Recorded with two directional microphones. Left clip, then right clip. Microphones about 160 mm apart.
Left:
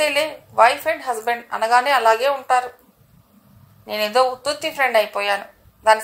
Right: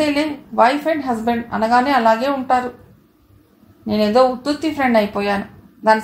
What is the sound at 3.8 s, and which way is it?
A woman's voice, 50° left (ahead or behind).